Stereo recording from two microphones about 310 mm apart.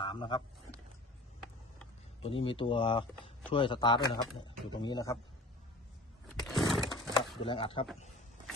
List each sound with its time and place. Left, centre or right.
0.0 s speech: centre
2.2 s speech: centre
6.2 s a sound: centre
7.4 s speech: centre